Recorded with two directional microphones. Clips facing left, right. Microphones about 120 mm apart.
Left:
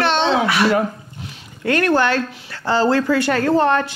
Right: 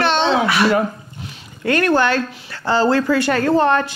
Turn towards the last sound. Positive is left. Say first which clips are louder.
# right 1 dB
turn(degrees=-25)  # may be behind; listen again after turning